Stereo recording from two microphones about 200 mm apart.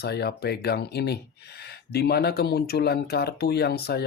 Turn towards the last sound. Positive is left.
turn(degrees=55)  # may be behind; listen again after turning